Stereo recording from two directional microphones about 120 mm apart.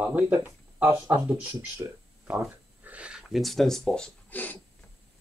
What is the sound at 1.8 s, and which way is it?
Speech, 30° right (ahead or behind).